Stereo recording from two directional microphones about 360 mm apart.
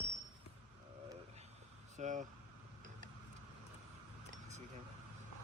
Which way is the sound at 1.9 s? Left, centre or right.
Centre.